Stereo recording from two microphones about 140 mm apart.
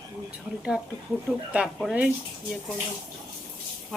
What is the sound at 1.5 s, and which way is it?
Speech, 10° right (ahead or behind).